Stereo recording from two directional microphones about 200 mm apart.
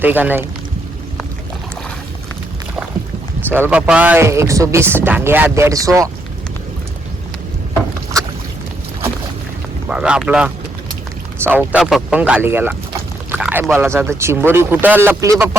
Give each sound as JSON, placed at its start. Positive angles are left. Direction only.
{"t": 0.0, "sound": "speech", "side_deg": -10}
{"t": 3.5, "sound": "speech", "side_deg": -10}
{"t": 9.9, "sound": "speech", "side_deg": -5}